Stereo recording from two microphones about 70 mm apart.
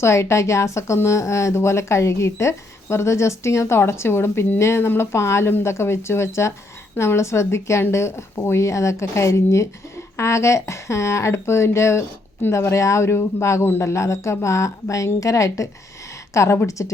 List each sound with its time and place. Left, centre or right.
0.0 s speech: left